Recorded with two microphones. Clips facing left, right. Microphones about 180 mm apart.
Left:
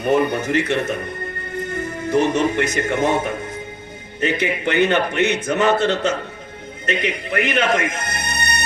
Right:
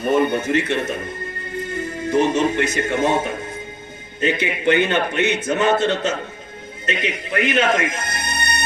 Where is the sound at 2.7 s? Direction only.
65° left (ahead or behind).